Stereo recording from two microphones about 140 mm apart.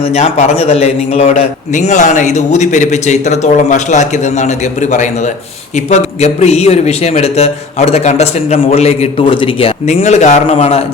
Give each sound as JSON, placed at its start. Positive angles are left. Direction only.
{"t": 0.0, "sound": "a man's voice", "side_deg": 50}